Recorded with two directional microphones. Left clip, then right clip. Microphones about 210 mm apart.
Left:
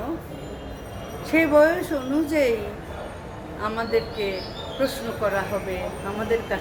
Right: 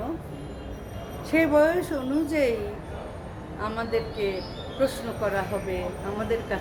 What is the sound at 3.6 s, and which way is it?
A woman's voice, 5° right (ahead or behind).